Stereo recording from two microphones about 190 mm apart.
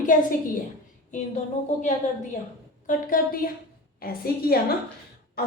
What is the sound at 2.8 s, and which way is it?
A woman's voice, 45° left (ahead or behind).